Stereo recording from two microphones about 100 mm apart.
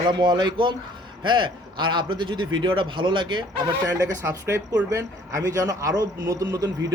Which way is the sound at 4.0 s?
25° right (ahead or behind).